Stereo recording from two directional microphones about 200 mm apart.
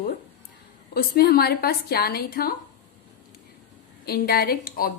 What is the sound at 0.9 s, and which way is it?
A woman's voice, 50° left (ahead or behind).